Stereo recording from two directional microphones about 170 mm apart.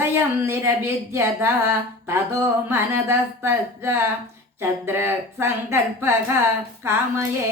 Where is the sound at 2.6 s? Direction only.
15° right (ahead or behind).